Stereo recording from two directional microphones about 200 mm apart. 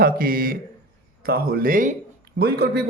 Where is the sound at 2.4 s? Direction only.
50° right (ahead or behind).